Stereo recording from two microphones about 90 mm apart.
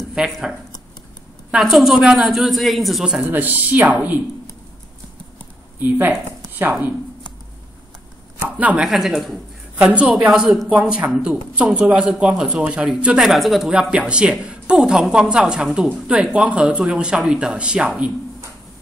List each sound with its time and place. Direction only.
0.1 s zipper: 5° right (ahead or behind)
1.5 s a woman's voice: centre (ahead or behind)
3.3 s speech: 20° right (ahead or behind)
5.8 s speech: 20° right (ahead or behind)
8.5 s speech: 15° right (ahead or behind)
8.8 s a woman's voice: 5° right (ahead or behind)
9.8 s speech: 15° right (ahead or behind)